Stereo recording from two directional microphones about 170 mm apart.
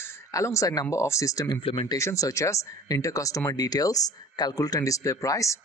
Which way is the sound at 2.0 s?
20° left (ahead or behind).